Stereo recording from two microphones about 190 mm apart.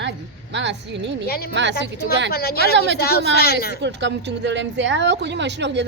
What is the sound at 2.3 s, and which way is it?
Speech, 55° left (ahead or behind).